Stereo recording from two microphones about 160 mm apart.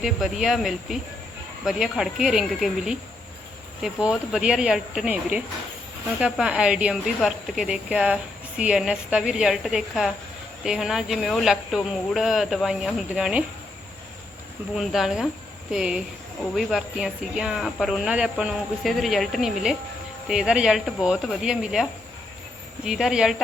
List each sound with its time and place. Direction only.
0.0 s speech: centre (ahead or behind)
14.8 s speech: centre (ahead or behind)